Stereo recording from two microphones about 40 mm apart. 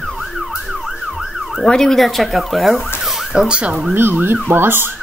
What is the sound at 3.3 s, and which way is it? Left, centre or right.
Speech, right.